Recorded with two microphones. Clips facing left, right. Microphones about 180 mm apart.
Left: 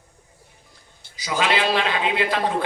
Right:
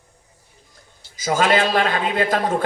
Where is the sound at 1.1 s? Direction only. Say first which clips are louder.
Right 5 dB; 45° right (ahead or behind).